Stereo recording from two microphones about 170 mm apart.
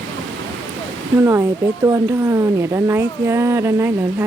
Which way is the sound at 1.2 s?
15° right (ahead or behind).